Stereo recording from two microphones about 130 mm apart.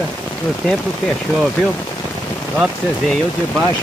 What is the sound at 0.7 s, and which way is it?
Speech, 5° left (ahead or behind).